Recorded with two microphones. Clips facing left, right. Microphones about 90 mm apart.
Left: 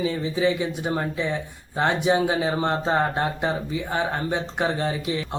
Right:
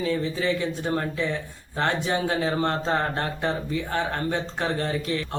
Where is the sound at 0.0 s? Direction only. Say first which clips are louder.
Left 2 dB; 15° left (ahead or behind).